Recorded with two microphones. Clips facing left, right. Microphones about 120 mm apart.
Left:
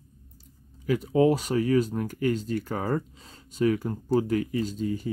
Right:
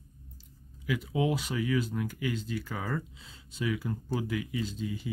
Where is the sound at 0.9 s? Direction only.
40° left (ahead or behind).